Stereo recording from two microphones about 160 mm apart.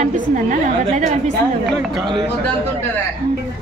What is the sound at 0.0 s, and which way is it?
A woman's voice, 50° right (ahead or behind).